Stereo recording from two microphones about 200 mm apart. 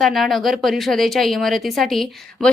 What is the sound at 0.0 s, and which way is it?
A woman's voice, centre (ahead or behind).